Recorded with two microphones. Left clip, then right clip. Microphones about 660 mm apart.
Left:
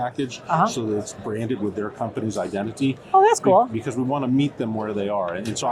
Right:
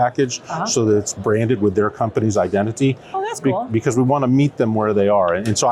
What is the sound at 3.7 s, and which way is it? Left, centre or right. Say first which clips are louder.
Speech: right 8 dB; right.